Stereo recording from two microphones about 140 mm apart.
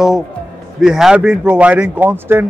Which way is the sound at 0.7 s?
5° right (ahead or behind).